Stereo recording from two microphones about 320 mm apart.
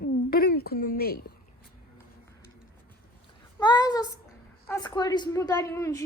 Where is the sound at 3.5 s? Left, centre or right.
Centre.